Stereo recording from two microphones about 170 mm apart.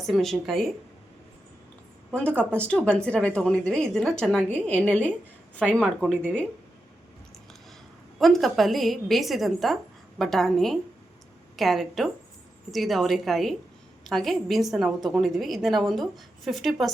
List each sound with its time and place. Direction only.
0.0 s a woman's voice: centre (ahead or behind)
2.1 s a woman's voice: 5° left (ahead or behind)
8.2 s a woman's voice: centre (ahead or behind)